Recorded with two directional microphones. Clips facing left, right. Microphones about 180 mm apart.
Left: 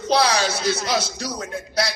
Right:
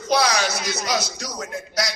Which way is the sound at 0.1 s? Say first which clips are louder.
Left 1 dB; 30° left (ahead or behind).